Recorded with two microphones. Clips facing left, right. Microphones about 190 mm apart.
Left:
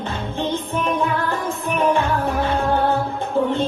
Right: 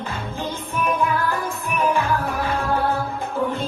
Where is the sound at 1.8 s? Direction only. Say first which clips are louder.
Left 2 dB; centre (ahead or behind).